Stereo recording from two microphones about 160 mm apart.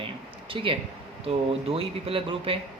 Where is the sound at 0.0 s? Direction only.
35° right (ahead or behind).